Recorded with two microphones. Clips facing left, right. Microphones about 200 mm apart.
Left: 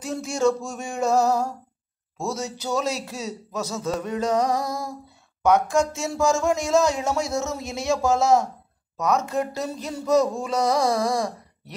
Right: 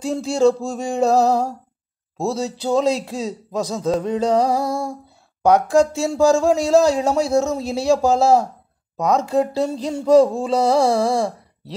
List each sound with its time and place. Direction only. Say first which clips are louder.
0.0 s speech: right 6 dB; 30° right (ahead or behind)